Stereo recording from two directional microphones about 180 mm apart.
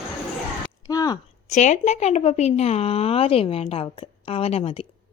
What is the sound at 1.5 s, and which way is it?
Speech, 40° left (ahead or behind).